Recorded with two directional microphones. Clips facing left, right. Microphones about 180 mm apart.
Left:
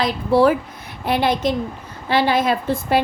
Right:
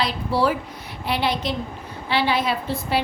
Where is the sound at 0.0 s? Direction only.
50° left (ahead or behind).